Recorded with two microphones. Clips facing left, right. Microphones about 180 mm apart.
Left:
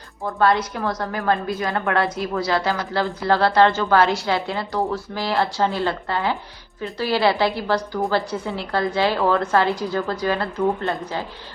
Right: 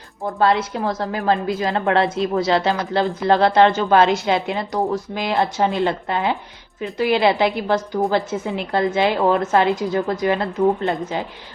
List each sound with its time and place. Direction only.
0.3 s a woman's voice: 20° right (ahead or behind)